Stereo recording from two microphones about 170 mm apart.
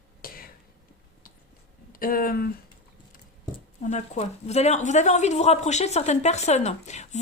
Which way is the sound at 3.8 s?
40° left (ahead or behind).